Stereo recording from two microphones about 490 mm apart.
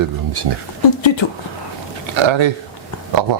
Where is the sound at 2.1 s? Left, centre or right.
Right.